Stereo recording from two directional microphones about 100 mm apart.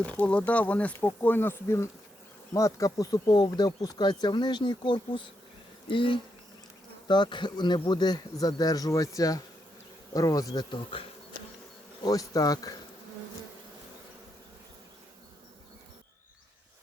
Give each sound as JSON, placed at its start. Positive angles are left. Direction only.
{"t": 0.0, "sound": "speech", "side_deg": 15}
{"t": 12.0, "sound": "speech", "side_deg": 35}